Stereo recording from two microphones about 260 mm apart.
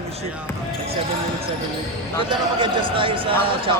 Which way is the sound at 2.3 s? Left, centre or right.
Centre.